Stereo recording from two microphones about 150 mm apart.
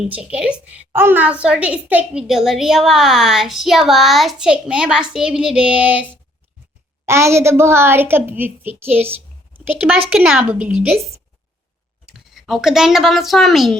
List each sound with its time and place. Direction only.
0.0 s a woman's voice: 5° right (ahead or behind)
12.0 s speech: centre (ahead or behind)